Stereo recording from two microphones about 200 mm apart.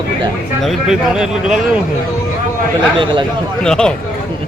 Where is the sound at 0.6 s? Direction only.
Centre (ahead or behind).